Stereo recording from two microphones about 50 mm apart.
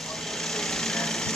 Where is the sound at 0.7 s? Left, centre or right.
Centre.